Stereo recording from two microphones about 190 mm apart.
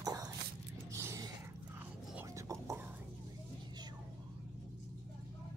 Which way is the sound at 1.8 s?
15° right (ahead or behind).